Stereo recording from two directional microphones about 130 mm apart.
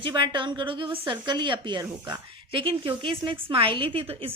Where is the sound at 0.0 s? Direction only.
40° right (ahead or behind).